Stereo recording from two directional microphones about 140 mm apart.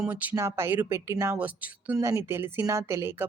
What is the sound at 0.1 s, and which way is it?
Speech, 15° right (ahead or behind).